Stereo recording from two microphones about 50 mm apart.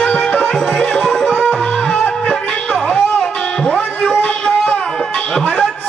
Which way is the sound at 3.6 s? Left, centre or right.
Centre.